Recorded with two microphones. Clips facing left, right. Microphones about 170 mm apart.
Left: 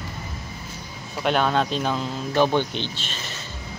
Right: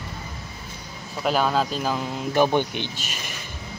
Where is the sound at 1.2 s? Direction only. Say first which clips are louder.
Left 1 dB; 5° right (ahead or behind).